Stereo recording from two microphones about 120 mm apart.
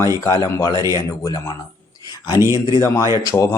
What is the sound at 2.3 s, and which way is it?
Speech, 25° right (ahead or behind).